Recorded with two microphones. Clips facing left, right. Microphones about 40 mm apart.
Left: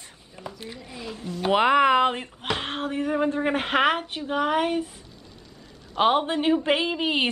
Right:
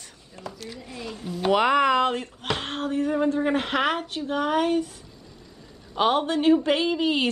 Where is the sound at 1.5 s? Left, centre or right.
Centre.